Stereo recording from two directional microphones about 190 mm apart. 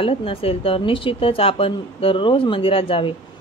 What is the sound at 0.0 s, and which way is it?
Speech, 30° left (ahead or behind).